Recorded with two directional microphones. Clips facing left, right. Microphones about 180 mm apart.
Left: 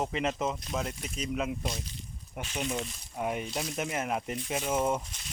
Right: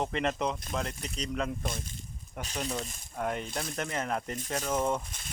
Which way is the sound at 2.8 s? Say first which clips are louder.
Left 1 dB; 45° right (ahead or behind).